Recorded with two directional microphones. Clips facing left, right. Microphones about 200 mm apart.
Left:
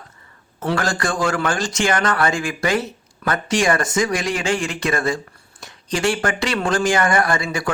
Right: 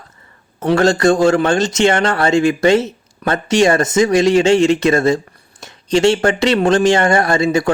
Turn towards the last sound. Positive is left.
turn(degrees=-25)  # may be behind; listen again after turning